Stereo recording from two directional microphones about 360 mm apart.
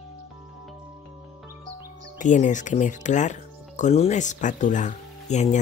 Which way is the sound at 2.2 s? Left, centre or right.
Left.